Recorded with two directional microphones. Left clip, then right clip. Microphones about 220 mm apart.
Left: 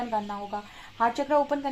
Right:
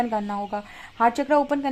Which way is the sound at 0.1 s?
45° right (ahead or behind).